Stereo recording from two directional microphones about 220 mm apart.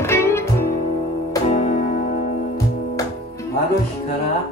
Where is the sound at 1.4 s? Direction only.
25° left (ahead or behind).